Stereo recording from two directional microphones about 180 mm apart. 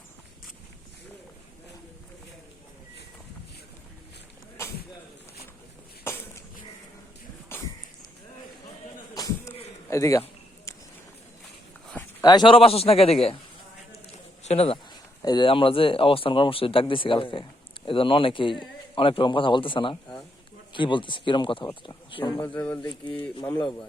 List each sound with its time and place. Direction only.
9.1 s a sound: 20° left (ahead or behind)
9.9 s speech: 15° left (ahead or behind)
10.7 s a sound: 15° left (ahead or behind)
12.2 s a man's voice: 25° left (ahead or behind)
14.4 s speech: 35° left (ahead or behind)
15.2 s speech: 25° left (ahead or behind)
22.4 s speech: 10° left (ahead or behind)